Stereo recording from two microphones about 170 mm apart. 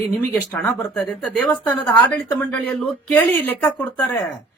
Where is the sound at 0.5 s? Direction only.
10° left (ahead or behind).